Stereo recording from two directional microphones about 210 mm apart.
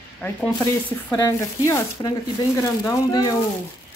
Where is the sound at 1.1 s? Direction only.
15° left (ahead or behind).